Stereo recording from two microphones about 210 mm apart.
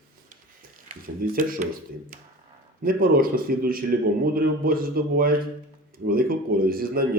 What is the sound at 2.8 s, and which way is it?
A man's voice, 45° right (ahead or behind).